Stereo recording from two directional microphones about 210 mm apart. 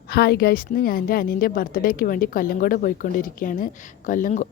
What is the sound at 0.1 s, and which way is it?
A woman's voice, 50° left (ahead or behind).